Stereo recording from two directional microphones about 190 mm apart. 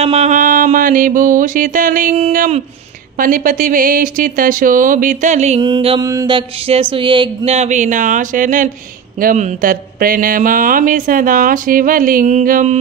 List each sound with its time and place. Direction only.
0.0 s speech: 35° right (ahead or behind)
5.6 s mantra: 25° right (ahead or behind)
6.0 s a sound: 20° right (ahead or behind); by 8.7 s 45° right (ahead or behind)
9.2 s speech: 40° right (ahead or behind)